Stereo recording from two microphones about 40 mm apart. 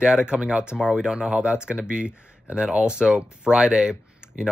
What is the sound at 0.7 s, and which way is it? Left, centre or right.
Speech, centre.